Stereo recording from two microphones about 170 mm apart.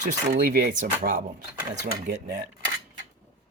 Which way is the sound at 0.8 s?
60° right (ahead or behind).